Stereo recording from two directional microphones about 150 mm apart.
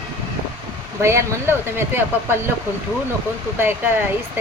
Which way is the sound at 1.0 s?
20° right (ahead or behind).